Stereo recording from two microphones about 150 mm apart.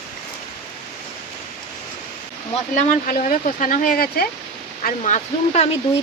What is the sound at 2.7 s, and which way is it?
Speech, 60° left (ahead or behind).